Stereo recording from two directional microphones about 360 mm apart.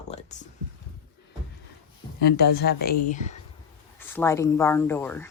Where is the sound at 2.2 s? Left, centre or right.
Left.